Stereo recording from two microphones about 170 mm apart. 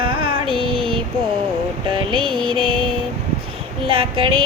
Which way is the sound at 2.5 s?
5° left (ahead or behind).